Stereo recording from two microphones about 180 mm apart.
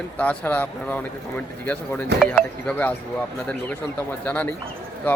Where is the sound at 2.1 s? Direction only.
5° left (ahead or behind).